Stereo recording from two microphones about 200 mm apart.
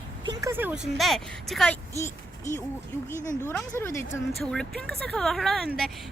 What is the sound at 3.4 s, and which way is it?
Speech, 10° left (ahead or behind).